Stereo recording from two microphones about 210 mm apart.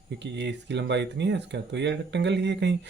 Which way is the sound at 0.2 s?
55° right (ahead or behind).